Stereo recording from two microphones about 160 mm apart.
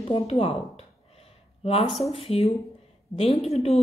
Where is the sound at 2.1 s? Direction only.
40° left (ahead or behind).